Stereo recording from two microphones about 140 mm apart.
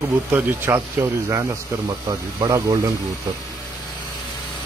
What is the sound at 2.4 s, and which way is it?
Speech, 30° right (ahead or behind).